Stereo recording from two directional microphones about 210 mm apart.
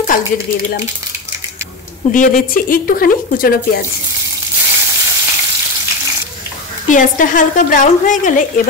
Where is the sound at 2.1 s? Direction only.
40° left (ahead or behind).